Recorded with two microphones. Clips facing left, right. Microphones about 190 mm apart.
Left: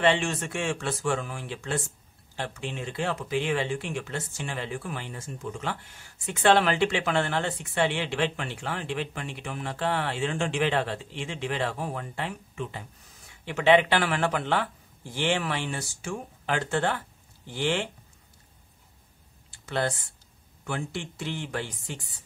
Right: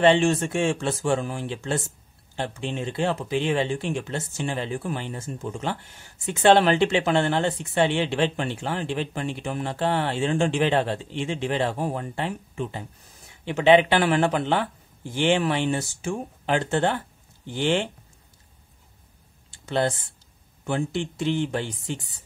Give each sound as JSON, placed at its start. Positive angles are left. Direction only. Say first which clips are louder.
{"t": 0.0, "sound": "speech", "louder": "right 6 dB", "side_deg": -30}
{"t": 13.5, "sound": "speech", "louder": "right 4 dB", "side_deg": -20}
{"t": 19.6, "sound": "speech", "louder": "right 4 dB", "side_deg": -25}